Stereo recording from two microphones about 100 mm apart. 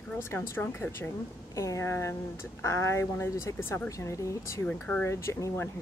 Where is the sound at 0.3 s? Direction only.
20° left (ahead or behind).